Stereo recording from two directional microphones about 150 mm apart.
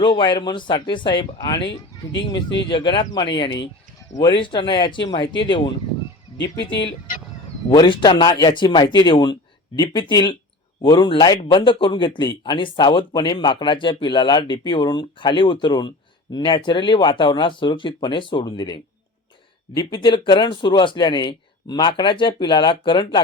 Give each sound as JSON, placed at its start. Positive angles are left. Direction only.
{"t": 0.0, "sound": "a man's voice", "side_deg": 30}